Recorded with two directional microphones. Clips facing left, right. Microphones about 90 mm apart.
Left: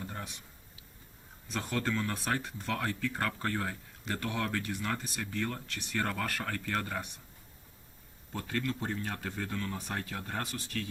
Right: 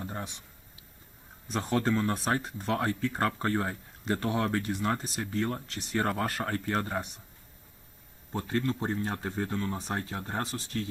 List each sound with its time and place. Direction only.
0.0 s a sound: 30° right (ahead or behind)
1.5 s speech: 30° right (ahead or behind)
8.3 s speech: 30° right (ahead or behind)